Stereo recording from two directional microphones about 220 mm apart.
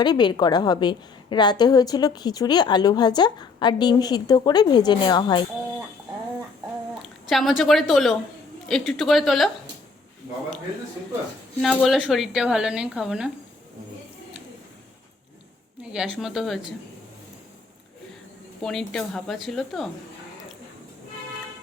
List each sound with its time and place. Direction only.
0.0 s a woman's voice: 20° left (ahead or behind)
7.0 s a woman's voice: centre (ahead or behind)
11.6 s a woman's voice: centre (ahead or behind)
15.8 s a woman's voice: 5° right (ahead or behind)
18.6 s a woman's voice: centre (ahead or behind)